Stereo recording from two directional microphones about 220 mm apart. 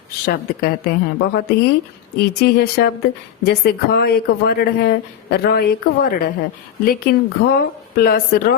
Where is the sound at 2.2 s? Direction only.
45° left (ahead or behind).